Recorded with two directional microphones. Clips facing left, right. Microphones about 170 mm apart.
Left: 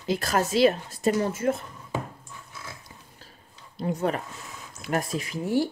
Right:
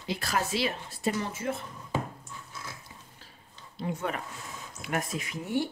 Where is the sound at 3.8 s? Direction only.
40° left (ahead or behind).